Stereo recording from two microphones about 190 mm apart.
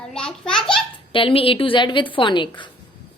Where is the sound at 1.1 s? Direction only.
30° left (ahead or behind).